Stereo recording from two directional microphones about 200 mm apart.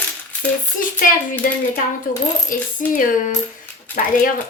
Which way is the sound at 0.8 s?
45° left (ahead or behind).